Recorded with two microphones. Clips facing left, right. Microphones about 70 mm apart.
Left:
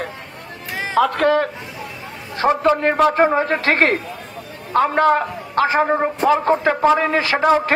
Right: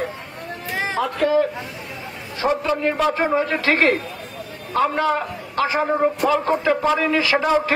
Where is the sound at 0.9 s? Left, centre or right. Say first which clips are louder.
Left 4 dB; left.